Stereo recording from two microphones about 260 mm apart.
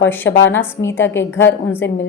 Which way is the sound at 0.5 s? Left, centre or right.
Centre.